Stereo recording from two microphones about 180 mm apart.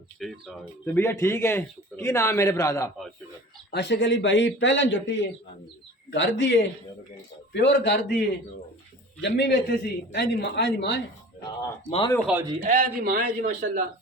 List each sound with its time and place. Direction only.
0.2 s speech: centre (ahead or behind)
0.9 s a man's voice: 15° left (ahead or behind)
3.7 s speech: 75° left (ahead or behind)
7.5 s a man's voice: 75° left (ahead or behind)
9.2 s a man's voice: 70° left (ahead or behind)
11.9 s speech: 30° left (ahead or behind)
12.2 s a man's voice: 10° right (ahead or behind)
12.6 s a man's voice: 50° right (ahead or behind)